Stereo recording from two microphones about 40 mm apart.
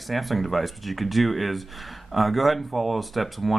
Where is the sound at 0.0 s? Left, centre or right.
Centre.